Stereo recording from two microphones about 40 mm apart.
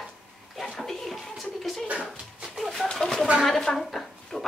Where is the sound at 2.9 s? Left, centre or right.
Centre.